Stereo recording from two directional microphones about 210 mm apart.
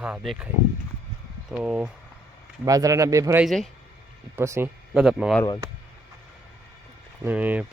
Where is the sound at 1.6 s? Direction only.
5° right (ahead or behind).